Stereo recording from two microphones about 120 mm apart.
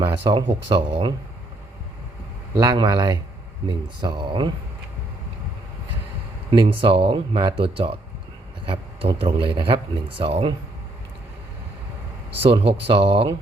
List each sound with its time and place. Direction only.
0.0 s speech: 35° right (ahead or behind)
2.6 s speech: 35° right (ahead or behind)
6.5 s speech: 45° right (ahead or behind)
12.4 s speech: 50° right (ahead or behind)